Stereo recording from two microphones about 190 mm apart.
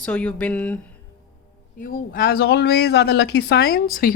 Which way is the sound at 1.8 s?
50° left (ahead or behind).